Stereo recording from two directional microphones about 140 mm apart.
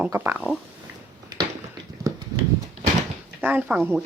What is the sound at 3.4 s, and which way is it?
Speech, 10° right (ahead or behind).